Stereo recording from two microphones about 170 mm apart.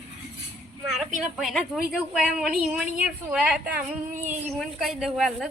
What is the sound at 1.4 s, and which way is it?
Speech, centre (ahead or behind).